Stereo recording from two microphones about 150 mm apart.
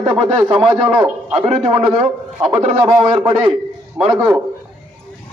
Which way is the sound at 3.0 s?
45° right (ahead or behind).